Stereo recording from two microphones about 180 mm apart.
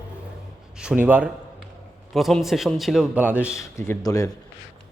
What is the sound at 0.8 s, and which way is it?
A man's voice, 5° right (ahead or behind).